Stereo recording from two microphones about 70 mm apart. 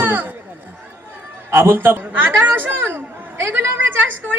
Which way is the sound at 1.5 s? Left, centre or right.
Right.